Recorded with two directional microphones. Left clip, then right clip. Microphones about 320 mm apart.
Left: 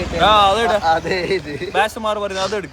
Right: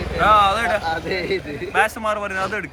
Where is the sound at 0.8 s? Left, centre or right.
Left.